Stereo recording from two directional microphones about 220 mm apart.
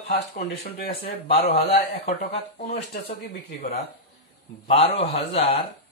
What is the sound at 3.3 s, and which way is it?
Speech, 45° left (ahead or behind).